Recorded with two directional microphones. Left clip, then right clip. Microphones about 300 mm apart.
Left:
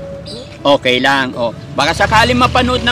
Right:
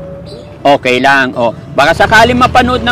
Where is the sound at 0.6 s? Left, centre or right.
Centre.